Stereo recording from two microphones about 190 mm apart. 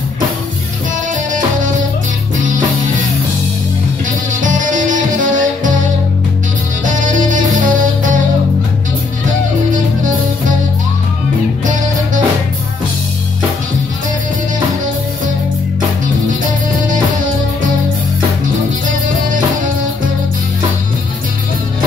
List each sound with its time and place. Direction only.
4.4 s music: 45° right (ahead or behind)
6.8 s music: 45° right (ahead or behind)
18.9 s music: 45° right (ahead or behind)